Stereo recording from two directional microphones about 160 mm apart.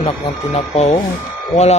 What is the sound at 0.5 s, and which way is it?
Speech, 40° left (ahead or behind).